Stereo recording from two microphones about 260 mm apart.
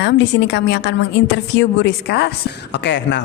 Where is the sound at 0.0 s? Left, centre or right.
Left.